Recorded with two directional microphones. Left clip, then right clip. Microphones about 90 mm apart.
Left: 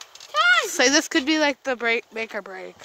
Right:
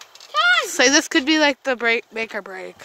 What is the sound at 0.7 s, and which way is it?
Speech, 10° right (ahead or behind).